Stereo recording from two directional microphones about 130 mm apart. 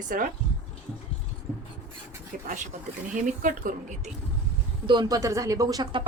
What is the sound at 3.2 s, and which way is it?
Speech, 90° right.